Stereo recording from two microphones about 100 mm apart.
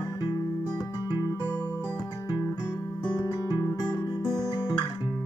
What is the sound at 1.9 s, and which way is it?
Music, 40° left (ahead or behind).